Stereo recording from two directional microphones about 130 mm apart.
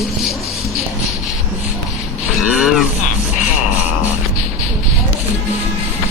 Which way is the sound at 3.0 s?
70° left (ahead or behind).